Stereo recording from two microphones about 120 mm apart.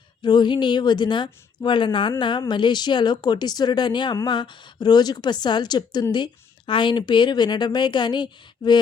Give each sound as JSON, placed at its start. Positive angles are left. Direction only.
{"t": 0.2, "sound": "a woman's voice", "side_deg": 40}